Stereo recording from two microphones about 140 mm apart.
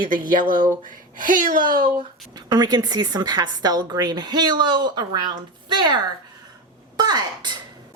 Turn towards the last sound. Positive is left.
turn(degrees=-30)  # may be behind; listen again after turning